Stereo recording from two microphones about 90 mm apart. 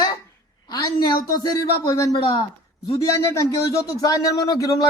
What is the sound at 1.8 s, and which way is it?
A man's voice, 40° left (ahead or behind).